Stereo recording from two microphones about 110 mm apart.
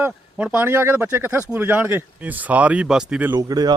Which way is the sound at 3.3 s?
35° right (ahead or behind).